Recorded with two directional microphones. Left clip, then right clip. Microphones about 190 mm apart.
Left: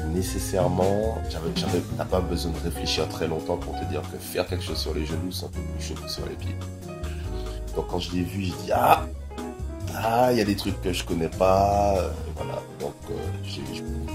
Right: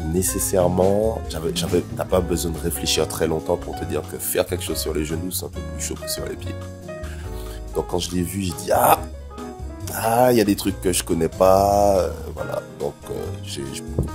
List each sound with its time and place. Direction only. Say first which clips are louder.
0.2 s speech: right 6 dB; 55° right (ahead or behind)
7.7 s speech: right 5 dB; 50° right (ahead or behind)